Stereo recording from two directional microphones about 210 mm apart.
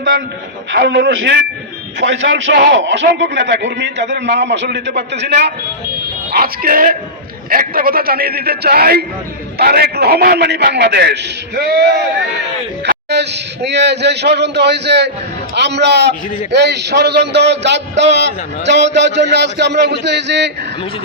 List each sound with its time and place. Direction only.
0.7 s a man's voice: 50° right (ahead or behind)
12.9 s a man's voice: 50° right (ahead or behind)